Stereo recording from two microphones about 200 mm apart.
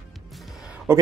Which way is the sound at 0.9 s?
15° right (ahead or behind).